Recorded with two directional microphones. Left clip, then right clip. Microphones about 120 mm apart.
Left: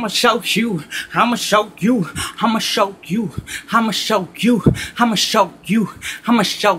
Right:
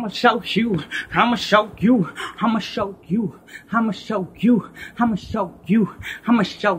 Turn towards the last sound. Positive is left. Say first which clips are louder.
# left 4 dB
turn(degrees=35)  # may be behind; listen again after turning